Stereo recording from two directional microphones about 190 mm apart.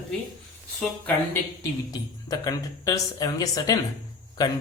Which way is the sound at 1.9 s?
20° left (ahead or behind).